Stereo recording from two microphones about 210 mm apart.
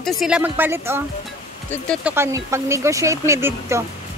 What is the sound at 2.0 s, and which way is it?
Speech, 10° right (ahead or behind).